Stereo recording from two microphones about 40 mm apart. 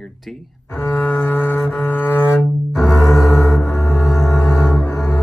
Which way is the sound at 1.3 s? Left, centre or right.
Left.